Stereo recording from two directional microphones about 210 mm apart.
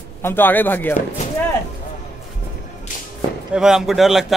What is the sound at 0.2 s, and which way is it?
Speech, 10° left (ahead or behind).